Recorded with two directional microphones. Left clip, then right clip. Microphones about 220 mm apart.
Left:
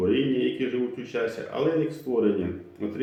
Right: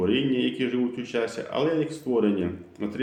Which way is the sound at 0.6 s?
45° right (ahead or behind).